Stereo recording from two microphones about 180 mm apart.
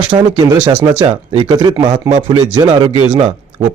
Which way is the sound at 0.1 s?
25° right (ahead or behind).